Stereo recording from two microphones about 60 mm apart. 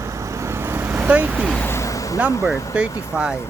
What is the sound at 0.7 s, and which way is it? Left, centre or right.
Vehicle, right.